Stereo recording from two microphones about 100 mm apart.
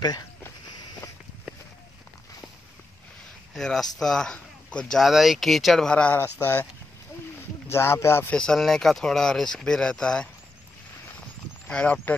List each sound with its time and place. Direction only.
3.5 s speech: 5° left (ahead or behind)
7.7 s speech: 25° left (ahead or behind)
8.3 s speech: 10° left (ahead or behind)
11.6 s speech: 15° left (ahead or behind)